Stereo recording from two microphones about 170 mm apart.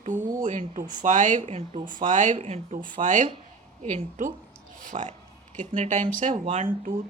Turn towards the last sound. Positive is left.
turn(degrees=-40)  # may be behind; listen again after turning